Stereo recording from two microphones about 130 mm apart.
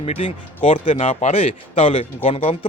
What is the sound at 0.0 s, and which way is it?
Speech, 50° left (ahead or behind).